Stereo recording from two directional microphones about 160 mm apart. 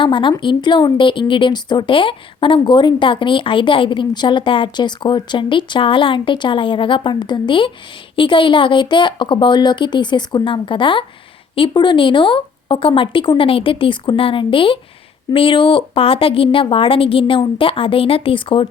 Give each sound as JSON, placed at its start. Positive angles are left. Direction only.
{"t": 0.0, "sound": "a woman's voice", "side_deg": 30}